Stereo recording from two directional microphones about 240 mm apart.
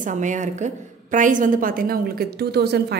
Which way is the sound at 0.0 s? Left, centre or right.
Right.